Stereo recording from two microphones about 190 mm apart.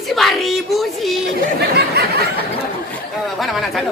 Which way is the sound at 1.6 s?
60° right (ahead or behind).